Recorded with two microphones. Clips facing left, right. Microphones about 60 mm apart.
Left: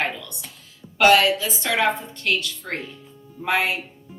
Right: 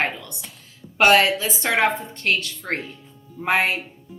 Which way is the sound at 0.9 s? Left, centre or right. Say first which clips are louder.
Even; right.